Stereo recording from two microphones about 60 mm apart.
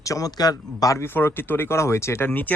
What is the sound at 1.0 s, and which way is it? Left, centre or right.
Speech, left.